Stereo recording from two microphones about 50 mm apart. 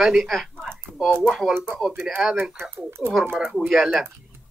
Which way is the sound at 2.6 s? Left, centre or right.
Right.